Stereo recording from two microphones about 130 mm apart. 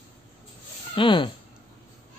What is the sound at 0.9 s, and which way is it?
Speech, 40° left (ahead or behind).